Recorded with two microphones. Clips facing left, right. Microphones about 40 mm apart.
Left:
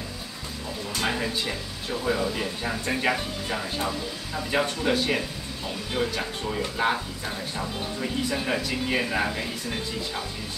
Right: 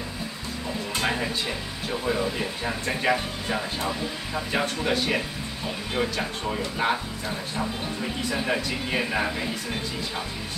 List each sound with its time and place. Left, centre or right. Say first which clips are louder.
1.0 s speech: even; centre
6.0 s speech: even; right
6.5 s speech: left 1 dB; centre